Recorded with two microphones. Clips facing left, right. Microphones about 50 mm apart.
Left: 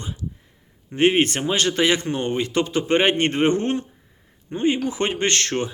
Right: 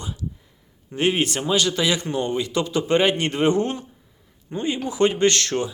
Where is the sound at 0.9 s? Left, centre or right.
Left.